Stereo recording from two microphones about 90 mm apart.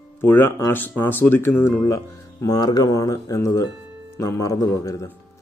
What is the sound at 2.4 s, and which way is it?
Speech, 45° left (ahead or behind).